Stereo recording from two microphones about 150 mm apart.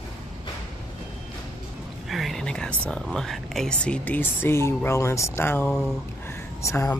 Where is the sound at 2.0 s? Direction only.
Centre (ahead or behind).